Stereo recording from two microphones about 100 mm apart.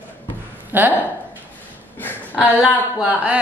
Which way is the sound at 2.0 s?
20° left (ahead or behind).